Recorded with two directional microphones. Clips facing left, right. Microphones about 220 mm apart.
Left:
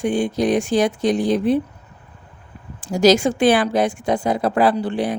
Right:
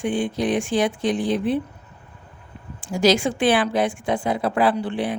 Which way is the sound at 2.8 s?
40° left (ahead or behind).